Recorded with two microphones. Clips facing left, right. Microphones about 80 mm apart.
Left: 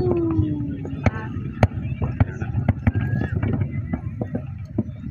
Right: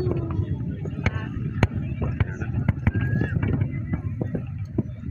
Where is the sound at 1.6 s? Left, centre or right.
Centre.